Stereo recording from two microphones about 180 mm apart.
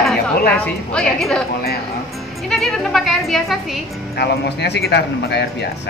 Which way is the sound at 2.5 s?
Centre (ahead or behind).